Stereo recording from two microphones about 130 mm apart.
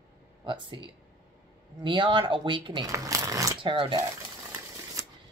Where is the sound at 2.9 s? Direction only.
25° right (ahead or behind).